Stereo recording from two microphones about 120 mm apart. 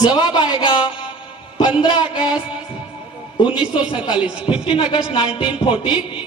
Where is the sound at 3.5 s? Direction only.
40° left (ahead or behind).